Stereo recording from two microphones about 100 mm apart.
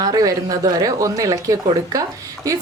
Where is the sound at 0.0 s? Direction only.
40° right (ahead or behind).